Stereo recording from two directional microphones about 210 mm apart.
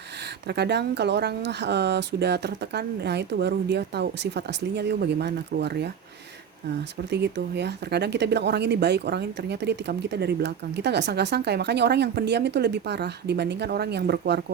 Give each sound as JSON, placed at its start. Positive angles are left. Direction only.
{"t": 0.4, "sound": "speech", "side_deg": -55}
{"t": 7.1, "sound": "speech", "side_deg": -55}